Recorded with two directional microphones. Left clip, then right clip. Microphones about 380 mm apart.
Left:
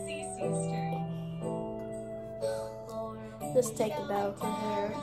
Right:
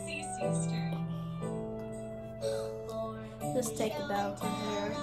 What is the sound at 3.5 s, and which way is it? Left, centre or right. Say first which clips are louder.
Speech: left 5 dB; centre.